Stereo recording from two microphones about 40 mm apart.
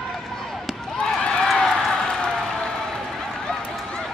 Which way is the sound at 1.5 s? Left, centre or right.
Centre.